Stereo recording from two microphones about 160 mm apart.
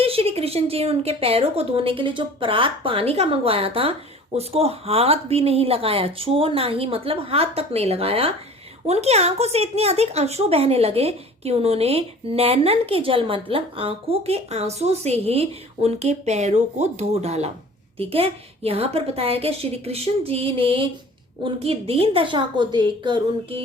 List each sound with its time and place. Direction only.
0.0 s a woman's voice: 35° right (ahead or behind)